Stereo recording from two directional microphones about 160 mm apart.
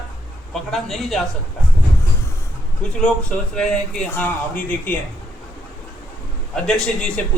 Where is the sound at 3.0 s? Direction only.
5° left (ahead or behind).